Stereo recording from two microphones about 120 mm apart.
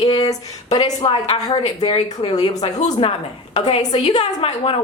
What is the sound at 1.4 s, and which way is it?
Speech, 35° left (ahead or behind).